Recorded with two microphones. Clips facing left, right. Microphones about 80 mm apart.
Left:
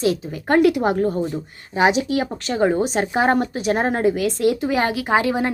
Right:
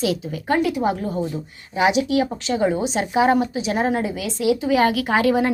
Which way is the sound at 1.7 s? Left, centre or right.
Left.